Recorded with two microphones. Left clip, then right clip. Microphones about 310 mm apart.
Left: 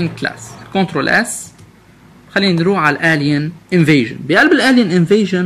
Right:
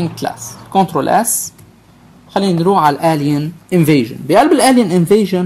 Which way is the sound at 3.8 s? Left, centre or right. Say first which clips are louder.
Left 1 dB; centre.